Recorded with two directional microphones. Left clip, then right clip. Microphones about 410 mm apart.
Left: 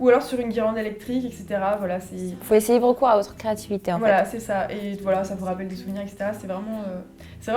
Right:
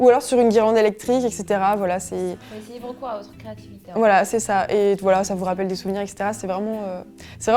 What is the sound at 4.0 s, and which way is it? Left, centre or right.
A woman's voice, right.